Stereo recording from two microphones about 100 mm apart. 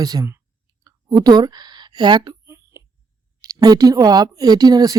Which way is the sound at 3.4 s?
40° right (ahead or behind).